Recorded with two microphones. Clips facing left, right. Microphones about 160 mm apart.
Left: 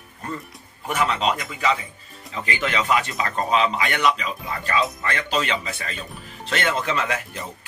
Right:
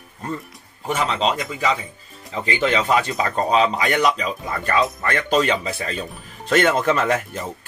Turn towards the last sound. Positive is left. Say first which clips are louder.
# right 5 dB
turn(degrees=-45)  # may be behind; listen again after turning